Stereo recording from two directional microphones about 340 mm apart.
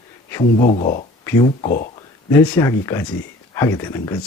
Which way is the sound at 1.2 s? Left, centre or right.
Centre.